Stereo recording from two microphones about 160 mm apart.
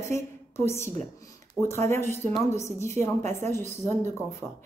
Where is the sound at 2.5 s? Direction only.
15° left (ahead or behind).